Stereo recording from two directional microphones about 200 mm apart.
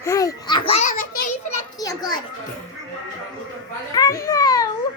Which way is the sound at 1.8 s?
20° left (ahead or behind).